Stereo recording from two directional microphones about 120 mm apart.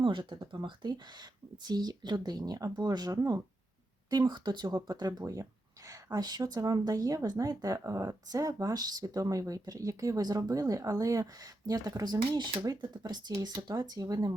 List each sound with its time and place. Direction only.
0.0 s speech: 40° right (ahead or behind)